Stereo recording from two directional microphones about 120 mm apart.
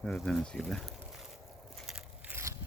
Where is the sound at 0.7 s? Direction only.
Centre (ahead or behind).